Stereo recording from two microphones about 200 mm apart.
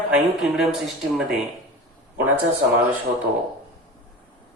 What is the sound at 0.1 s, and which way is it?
Speech, 5° right (ahead or behind).